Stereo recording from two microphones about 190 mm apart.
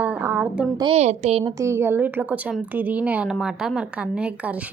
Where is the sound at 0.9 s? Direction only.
35° right (ahead or behind).